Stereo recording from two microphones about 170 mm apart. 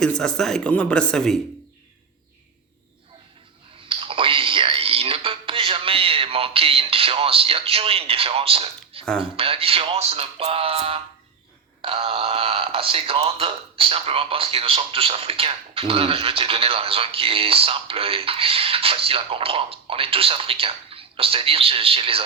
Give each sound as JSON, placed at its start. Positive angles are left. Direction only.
{"t": 0.0, "sound": "speech", "side_deg": 5}
{"t": 3.8, "sound": "a sound", "side_deg": -30}
{"t": 9.1, "sound": "speech", "side_deg": -35}